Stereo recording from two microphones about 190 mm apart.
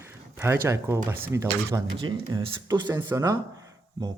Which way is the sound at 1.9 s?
25° right (ahead or behind).